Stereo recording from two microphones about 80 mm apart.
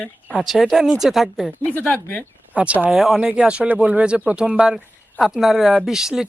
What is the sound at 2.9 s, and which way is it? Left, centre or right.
Speech, centre.